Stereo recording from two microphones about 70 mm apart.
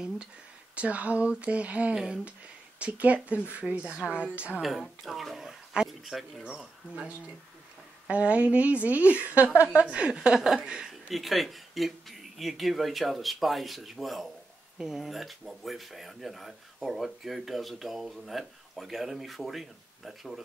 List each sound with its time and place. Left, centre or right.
0.7 s speech: centre
2.0 s speech: centre
2.8 s a woman's voice: centre
4.6 s speech: centre
6.5 s speech: centre
8.1 s a woman's voice: centre
9.5 s a woman's voice: left
9.8 s speech: centre